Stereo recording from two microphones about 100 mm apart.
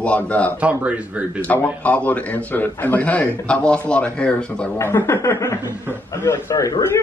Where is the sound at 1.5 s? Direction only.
15° left (ahead or behind).